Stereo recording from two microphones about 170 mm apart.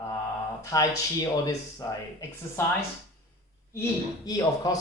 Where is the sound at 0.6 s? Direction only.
20° left (ahead or behind).